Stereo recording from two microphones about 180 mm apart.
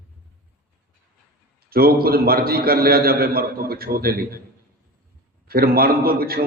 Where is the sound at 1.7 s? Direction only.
55° right (ahead or behind).